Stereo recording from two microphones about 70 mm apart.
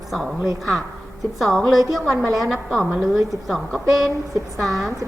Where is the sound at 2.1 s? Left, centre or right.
Right.